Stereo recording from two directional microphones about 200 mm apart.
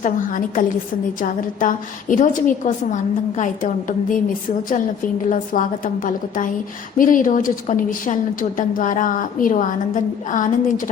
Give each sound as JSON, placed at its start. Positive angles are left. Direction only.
{"t": 0.0, "sound": "a woman's voice", "side_deg": 40}
{"t": 5.3, "sound": "a woman's voice", "side_deg": 40}